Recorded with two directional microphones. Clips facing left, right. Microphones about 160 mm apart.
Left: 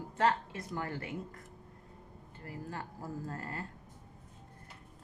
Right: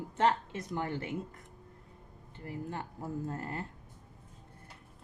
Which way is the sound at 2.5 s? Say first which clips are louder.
Right 3 dB; 25° right (ahead or behind).